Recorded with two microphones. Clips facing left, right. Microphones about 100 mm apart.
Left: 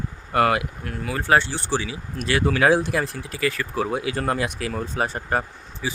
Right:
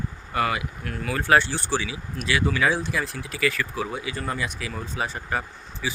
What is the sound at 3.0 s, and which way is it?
Speech, 40° left (ahead or behind).